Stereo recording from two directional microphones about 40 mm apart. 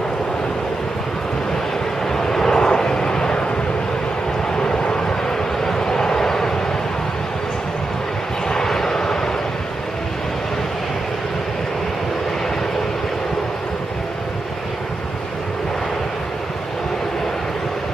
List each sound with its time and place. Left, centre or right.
2.1 s vehicle: centre
4.6 s vehicle: centre
8.5 s vehicle: centre